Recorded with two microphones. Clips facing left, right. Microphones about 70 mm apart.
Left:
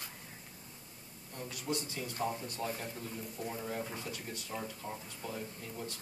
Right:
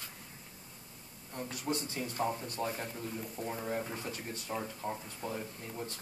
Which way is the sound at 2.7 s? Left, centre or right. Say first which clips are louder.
Right 2 dB; right.